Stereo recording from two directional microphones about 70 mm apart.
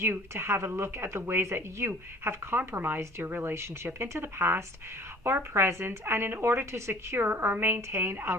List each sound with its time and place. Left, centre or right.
0.0 s speech: right